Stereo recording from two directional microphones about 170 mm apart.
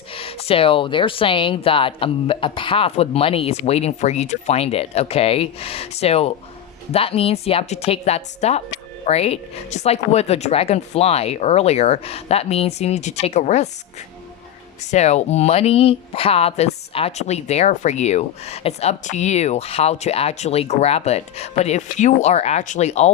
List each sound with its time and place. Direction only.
0.1 s speech: 35° left (ahead or behind)
14.8 s speech: 40° left (ahead or behind)